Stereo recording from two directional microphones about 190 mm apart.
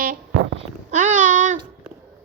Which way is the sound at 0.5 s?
40° right (ahead or behind).